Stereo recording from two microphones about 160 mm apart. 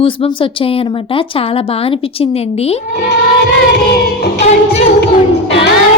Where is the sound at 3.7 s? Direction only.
90° left.